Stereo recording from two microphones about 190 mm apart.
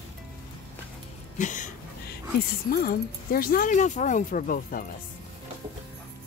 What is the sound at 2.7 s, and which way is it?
Speech, 50° left (ahead or behind).